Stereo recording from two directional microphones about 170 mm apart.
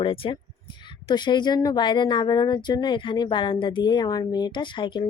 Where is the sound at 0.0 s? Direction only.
30° left (ahead or behind).